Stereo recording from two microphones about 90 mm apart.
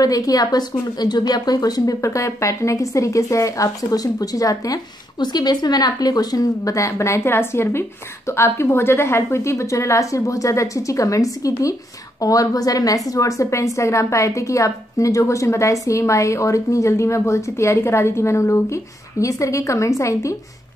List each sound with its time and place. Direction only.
0.0 s a woman's voice: 40° left (ahead or behind)